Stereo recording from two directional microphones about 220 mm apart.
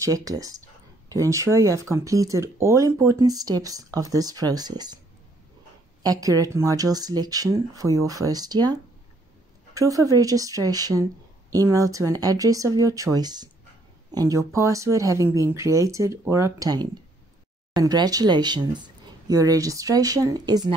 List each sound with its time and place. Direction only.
0.0 s speech: 15° right (ahead or behind)
6.0 s speech: 15° right (ahead or behind)
9.8 s speech: 15° right (ahead or behind)